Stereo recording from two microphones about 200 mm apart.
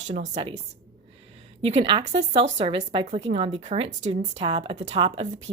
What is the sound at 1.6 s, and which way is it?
Speech, 30° right (ahead or behind).